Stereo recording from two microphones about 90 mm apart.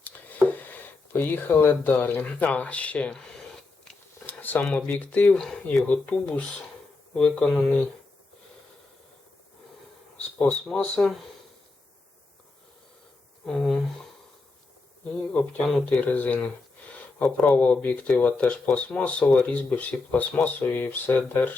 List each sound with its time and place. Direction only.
0.6 s speech: 20° left (ahead or behind)
4.3 s a sound: 20° left (ahead or behind)
4.6 s speech: 10° left (ahead or behind)
10.8 s speech: 15° left (ahead or behind)
13.4 s speech: 5° left (ahead or behind)
15.5 s speech: 10° left (ahead or behind)